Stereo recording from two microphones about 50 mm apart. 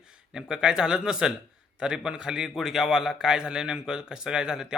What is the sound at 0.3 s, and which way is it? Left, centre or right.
A man's voice, centre.